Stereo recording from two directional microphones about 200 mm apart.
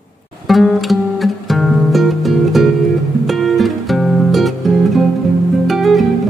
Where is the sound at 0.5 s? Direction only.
Centre (ahead or behind).